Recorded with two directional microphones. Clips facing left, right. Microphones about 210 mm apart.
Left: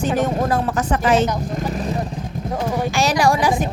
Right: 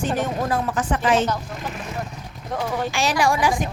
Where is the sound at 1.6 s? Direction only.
35° left (ahead or behind).